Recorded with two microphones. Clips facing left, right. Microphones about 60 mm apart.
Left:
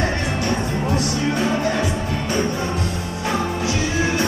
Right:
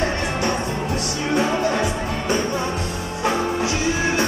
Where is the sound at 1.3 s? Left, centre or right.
Right.